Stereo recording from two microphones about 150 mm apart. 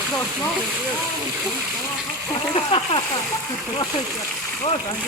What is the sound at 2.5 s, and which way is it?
Speech, 40° left (ahead or behind).